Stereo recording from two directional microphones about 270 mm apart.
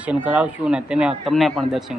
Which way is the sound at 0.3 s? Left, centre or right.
Centre.